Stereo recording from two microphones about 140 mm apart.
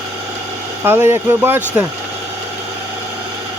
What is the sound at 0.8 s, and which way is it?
Speech, 15° right (ahead or behind).